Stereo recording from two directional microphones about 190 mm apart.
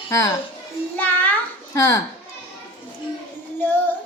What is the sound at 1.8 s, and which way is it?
Speech, 15° left (ahead or behind).